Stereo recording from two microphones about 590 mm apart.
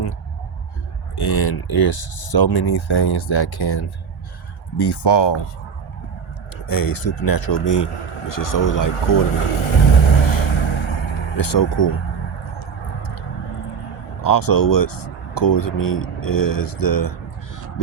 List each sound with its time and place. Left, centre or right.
1.1 s speech: left
6.7 s speech: left
8.9 s speech: left
9.4 s vehicle: left
11.4 s speech: left
13.0 s a sound: left
14.2 s speech: left